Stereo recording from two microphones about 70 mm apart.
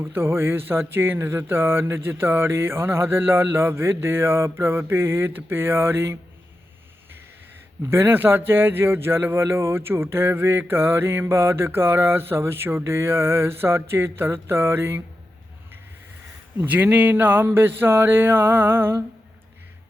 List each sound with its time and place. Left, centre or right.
0.0 s speech: right
7.9 s speech: right
16.6 s speech: right